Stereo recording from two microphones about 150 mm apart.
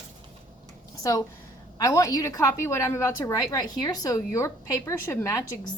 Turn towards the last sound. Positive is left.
turn(degrees=20)  # may be behind; listen again after turning